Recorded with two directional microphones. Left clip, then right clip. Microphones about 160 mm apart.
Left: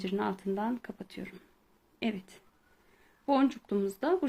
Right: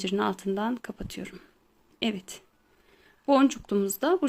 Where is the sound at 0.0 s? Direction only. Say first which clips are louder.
Right 5 dB; 35° right (ahead or behind).